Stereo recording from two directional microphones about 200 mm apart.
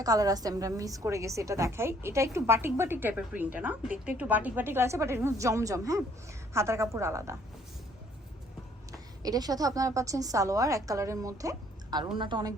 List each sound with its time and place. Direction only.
0.0 s a woman's voice: 20° right (ahead or behind)
8.9 s a woman's voice: 20° right (ahead or behind)